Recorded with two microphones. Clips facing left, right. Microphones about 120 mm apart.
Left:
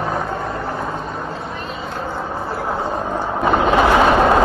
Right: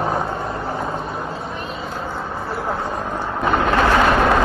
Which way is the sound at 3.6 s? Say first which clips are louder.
Left 3 dB; 15° left (ahead or behind).